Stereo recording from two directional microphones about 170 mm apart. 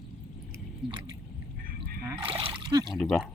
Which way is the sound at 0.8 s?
Centre (ahead or behind).